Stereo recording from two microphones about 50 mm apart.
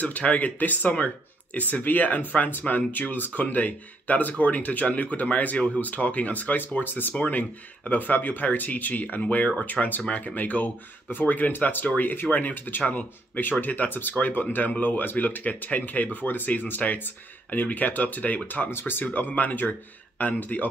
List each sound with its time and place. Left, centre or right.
0.0 s speech: left
18.7 s speech: left
19.0 s speech: left